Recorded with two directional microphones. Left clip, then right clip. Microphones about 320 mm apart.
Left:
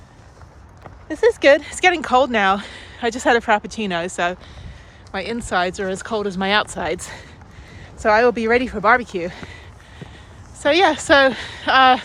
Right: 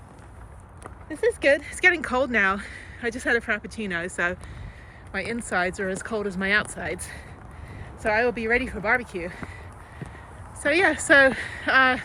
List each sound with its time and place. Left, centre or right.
1.0 s speech: centre
10.6 s speech: centre